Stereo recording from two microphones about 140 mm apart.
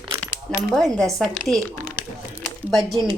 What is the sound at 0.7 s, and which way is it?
Speech, centre (ahead or behind).